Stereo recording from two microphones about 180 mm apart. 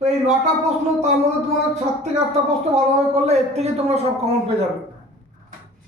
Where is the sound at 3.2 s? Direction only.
35° right (ahead or behind).